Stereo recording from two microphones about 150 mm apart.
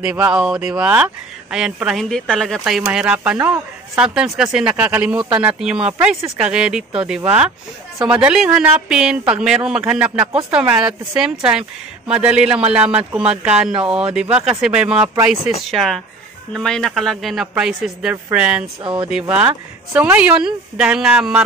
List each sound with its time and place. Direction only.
0.0 s speech: 10° right (ahead or behind)
15.1 s speech: 20° right (ahead or behind)
15.7 s speech: centre (ahead or behind)
18.8 s speech: 35° right (ahead or behind)
19.0 s speech: 5° right (ahead or behind)